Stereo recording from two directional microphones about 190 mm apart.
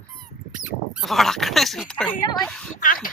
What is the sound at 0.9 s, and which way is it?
Speech, centre (ahead or behind).